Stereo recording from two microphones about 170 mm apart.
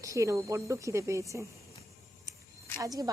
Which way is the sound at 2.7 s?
20° right (ahead or behind).